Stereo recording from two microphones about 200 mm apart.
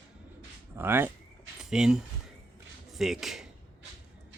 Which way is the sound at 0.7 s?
10° right (ahead or behind).